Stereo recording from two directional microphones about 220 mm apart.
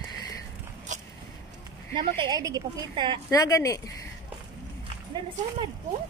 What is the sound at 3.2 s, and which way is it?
Speech, 15° left (ahead or behind).